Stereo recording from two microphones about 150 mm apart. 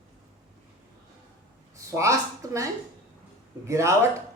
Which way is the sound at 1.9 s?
20° right (ahead or behind).